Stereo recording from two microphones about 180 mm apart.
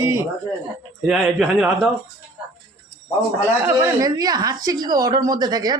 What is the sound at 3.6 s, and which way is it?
Speech, 15° right (ahead or behind).